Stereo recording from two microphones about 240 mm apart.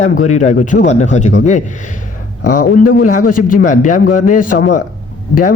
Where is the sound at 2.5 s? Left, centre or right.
Left.